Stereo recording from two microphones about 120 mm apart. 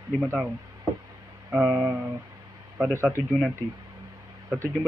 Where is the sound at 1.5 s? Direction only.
10° right (ahead or behind).